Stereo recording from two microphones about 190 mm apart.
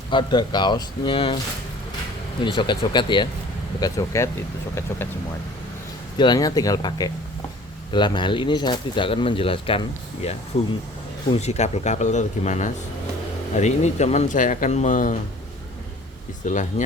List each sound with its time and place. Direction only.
0.1 s speech: 25° left (ahead or behind)
2.4 s speech: 25° left (ahead or behind)
6.1 s speech: 20° left (ahead or behind)
11.3 s speech: 35° left (ahead or behind)
16.5 s speech: 40° left (ahead or behind)